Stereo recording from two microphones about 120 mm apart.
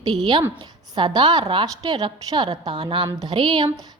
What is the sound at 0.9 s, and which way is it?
A woman's voice, 40° right (ahead or behind).